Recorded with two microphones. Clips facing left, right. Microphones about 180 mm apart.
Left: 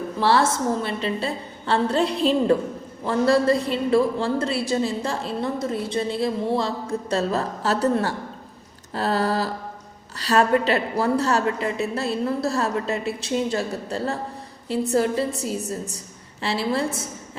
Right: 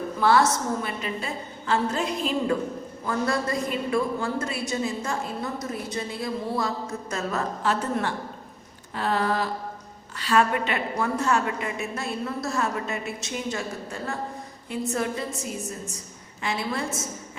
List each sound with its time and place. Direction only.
0.2 s a woman's voice: 30° left (ahead or behind)